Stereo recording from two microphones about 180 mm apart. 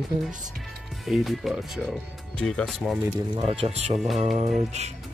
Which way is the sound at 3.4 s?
35° right (ahead or behind).